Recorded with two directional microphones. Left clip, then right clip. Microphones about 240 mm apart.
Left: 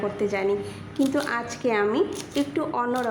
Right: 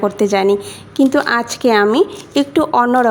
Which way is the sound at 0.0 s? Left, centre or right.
Right.